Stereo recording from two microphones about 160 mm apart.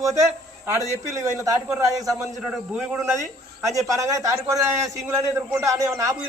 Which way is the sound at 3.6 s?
20° right (ahead or behind).